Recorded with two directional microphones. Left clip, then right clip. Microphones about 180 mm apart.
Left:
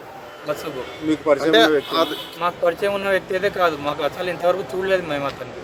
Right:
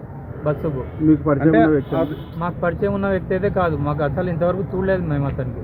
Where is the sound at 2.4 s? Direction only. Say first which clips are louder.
Left 2 dB; 10° left (ahead or behind).